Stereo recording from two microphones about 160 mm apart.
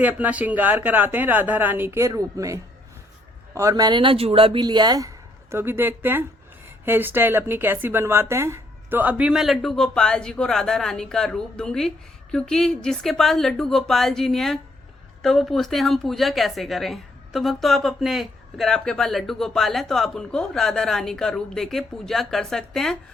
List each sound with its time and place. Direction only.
0.0 s a woman's voice: 10° right (ahead or behind)